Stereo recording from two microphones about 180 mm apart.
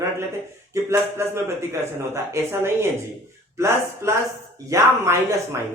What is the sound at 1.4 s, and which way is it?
Speech, 15° right (ahead or behind).